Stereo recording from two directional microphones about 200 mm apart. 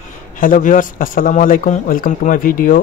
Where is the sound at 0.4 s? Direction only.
40° left (ahead or behind).